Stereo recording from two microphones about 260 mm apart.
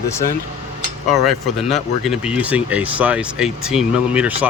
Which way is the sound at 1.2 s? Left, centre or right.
Centre.